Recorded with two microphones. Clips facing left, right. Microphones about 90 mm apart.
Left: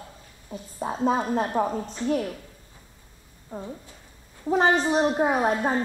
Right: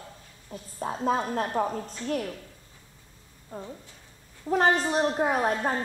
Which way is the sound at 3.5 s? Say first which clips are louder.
Left 3 dB; 10° left (ahead or behind).